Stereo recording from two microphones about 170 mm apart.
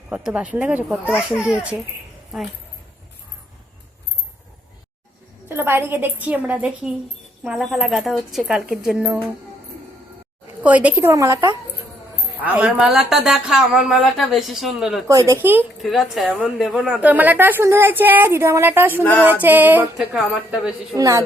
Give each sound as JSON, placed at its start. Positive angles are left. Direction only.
{"t": 0.1, "sound": "speech", "side_deg": -5}
{"t": 5.5, "sound": "a woman's voice", "side_deg": -15}
{"t": 10.6, "sound": "a woman's voice", "side_deg": -10}
{"t": 15.0, "sound": "a woman's voice", "side_deg": -20}
{"t": 15.8, "sound": "a woman's voice", "side_deg": 0}
{"t": 20.9, "sound": "a woman's voice", "side_deg": -20}